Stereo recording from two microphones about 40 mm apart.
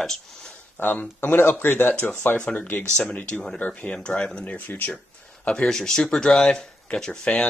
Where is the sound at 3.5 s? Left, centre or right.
Left.